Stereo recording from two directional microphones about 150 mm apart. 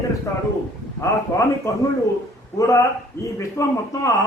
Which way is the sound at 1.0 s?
20° left (ahead or behind).